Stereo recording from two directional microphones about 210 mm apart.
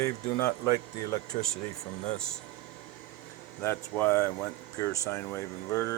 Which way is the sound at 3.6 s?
10° left (ahead or behind).